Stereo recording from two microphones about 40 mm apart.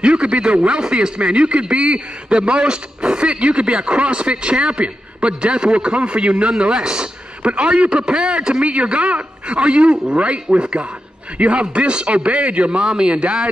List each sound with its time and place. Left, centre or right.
0.0 s a man's voice: right
12.8 s a man's voice: centre